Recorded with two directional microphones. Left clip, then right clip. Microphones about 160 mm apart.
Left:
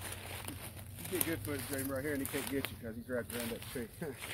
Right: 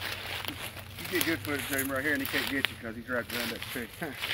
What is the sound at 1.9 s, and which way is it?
Speech, 60° left (ahead or behind).